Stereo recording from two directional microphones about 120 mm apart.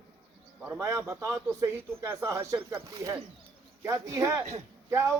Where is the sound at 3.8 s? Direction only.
25° right (ahead or behind).